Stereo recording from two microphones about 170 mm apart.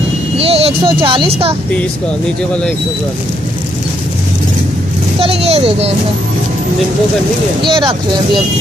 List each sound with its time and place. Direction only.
0.4 s speech: 35° right (ahead or behind)
5.2 s a child's voice: 35° right (ahead or behind)
7.6 s speech: 30° right (ahead or behind)